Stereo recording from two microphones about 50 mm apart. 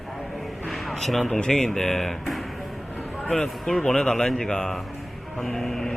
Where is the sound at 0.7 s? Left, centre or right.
Centre.